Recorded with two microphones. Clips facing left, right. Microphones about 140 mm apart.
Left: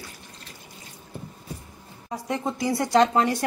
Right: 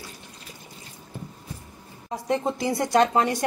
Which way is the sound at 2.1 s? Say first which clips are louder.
Right 3 dB; 25° right (ahead or behind).